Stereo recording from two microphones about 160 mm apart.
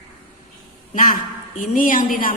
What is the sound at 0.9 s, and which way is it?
A man's voice, 55° left (ahead or behind).